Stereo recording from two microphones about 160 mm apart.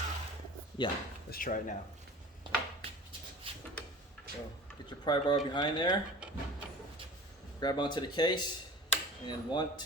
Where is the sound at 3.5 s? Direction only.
35° right (ahead or behind).